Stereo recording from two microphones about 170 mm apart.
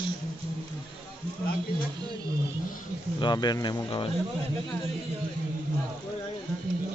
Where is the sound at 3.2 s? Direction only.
25° left (ahead or behind).